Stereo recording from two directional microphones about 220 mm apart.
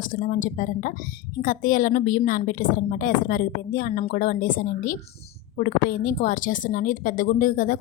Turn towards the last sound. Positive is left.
turn(degrees=40)  # may be behind; listen again after turning